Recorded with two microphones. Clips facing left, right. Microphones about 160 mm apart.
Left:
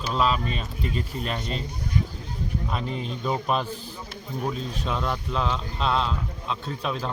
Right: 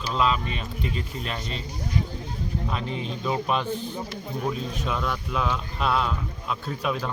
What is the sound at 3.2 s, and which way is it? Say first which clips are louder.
Speech: even; centre (ahead or behind).